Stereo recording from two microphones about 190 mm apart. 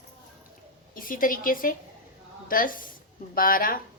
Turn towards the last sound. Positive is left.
turn(degrees=45)  # may be behind; listen again after turning